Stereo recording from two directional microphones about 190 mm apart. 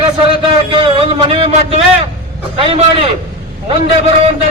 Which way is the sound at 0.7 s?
25° right (ahead or behind).